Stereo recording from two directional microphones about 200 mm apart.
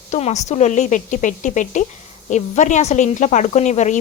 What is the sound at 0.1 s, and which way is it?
A woman's voice, 35° left (ahead or behind).